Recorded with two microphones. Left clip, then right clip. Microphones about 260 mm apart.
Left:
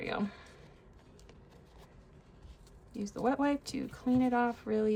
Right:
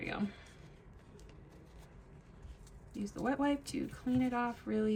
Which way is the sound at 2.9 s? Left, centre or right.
Left.